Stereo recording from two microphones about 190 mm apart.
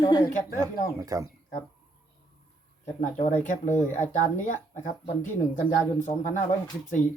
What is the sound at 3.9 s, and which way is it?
Speech, 40° left (ahead or behind).